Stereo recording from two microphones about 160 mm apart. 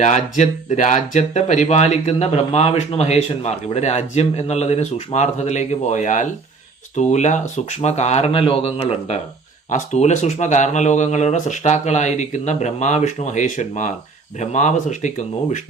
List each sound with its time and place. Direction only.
0.0 s speech: 50° left (ahead or behind)
9.6 s speech: 50° left (ahead or behind)